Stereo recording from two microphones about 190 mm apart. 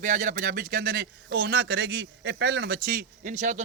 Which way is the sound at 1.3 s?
70° right (ahead or behind).